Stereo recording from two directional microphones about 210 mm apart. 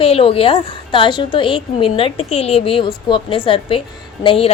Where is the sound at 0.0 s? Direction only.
25° left (ahead or behind).